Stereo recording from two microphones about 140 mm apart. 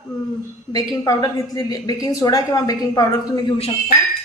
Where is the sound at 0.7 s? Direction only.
25° left (ahead or behind).